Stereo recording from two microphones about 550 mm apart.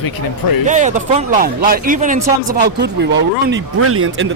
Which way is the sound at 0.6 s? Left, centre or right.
Centre.